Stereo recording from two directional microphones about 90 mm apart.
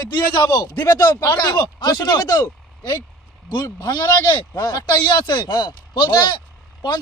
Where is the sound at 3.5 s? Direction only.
50° left (ahead or behind).